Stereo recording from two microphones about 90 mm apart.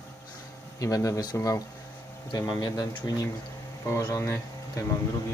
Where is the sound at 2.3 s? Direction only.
55° left (ahead or behind).